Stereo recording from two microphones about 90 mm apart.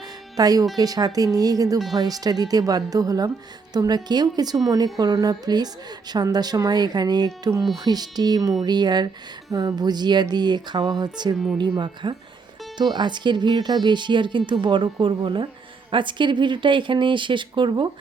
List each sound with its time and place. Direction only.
0.3 s a woman's voice: 45° right (ahead or behind); by 17.8 s 60° right (ahead or behind)